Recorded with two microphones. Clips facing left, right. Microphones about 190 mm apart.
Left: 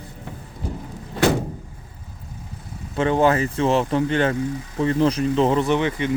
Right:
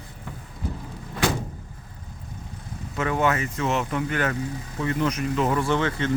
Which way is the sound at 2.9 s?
30° left (ahead or behind).